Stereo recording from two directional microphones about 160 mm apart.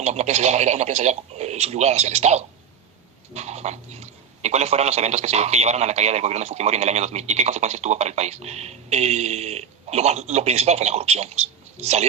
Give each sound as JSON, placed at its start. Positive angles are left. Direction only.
{"t": 0.0, "sound": "speech", "side_deg": -45}